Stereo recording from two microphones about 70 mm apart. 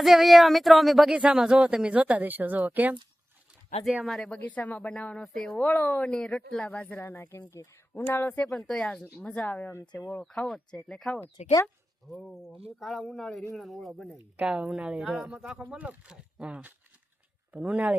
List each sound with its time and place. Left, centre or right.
0.0 s speech: centre
1.1 s speech: centre
4.0 s speech: centre
4.3 s speech: left
6.1 s speech: centre
6.7 s speech: left
7.0 s speech: left
8.5 s speech: centre
9.1 s speech: left
10.2 s speech: centre
12.8 s speech: centre
14.3 s speech: centre
15.5 s speech: centre